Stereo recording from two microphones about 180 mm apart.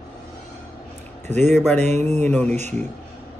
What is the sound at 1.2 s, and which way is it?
A man's voice, 40° right (ahead or behind).